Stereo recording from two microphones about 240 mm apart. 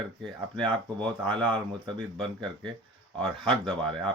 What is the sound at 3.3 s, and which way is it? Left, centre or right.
Speech, centre.